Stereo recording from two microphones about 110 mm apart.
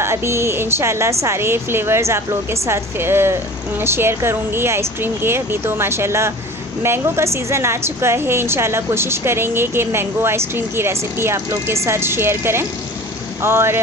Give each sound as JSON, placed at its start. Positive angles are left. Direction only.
{"t": 0.0, "sound": "a woman's voice", "side_deg": -25}